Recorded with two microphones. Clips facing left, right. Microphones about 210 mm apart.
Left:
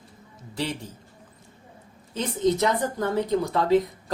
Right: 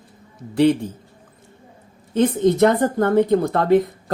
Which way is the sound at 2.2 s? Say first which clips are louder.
Right 8 dB; 55° right (ahead or behind).